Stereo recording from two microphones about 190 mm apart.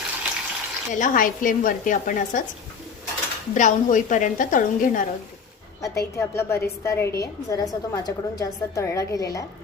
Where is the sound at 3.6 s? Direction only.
40° left (ahead or behind).